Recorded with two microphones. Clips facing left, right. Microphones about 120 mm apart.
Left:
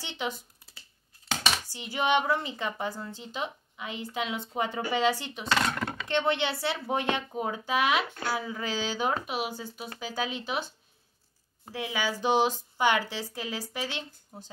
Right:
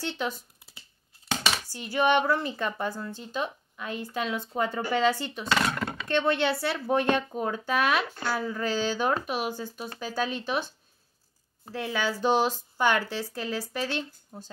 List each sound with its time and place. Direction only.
0.0 s a woman's voice: 15° left (ahead or behind)
1.7 s a woman's voice: 15° left (ahead or behind)
11.7 s a woman's voice: 15° left (ahead or behind)